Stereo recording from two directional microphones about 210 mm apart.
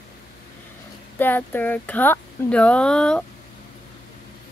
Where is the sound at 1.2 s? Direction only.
10° left (ahead or behind).